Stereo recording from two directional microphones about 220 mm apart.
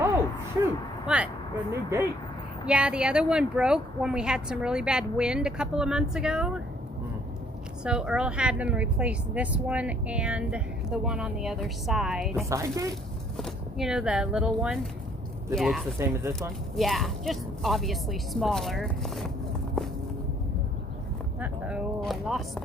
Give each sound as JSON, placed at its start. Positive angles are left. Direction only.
{"t": 0.6, "sound": "a sound", "side_deg": -5}
{"t": 2.6, "sound": "speech", "side_deg": -5}
{"t": 7.9, "sound": "speech", "side_deg": -5}
{"t": 12.5, "sound": "speech", "side_deg": -15}
{"t": 13.3, "sound": "speech", "side_deg": 0}
{"t": 16.0, "sound": "speech", "side_deg": -10}
{"t": 16.7, "sound": "speech", "side_deg": 0}
{"t": 21.4, "sound": "a sound", "side_deg": -5}